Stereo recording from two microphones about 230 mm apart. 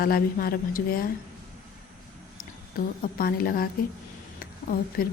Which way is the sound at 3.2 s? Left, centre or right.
Left.